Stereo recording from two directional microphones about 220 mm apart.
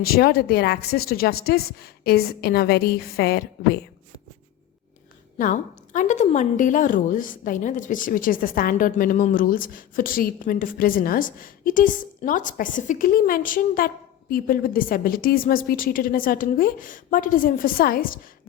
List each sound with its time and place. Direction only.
0.0 s speech: 45° left (ahead or behind)
5.4 s a woman's voice: 35° left (ahead or behind)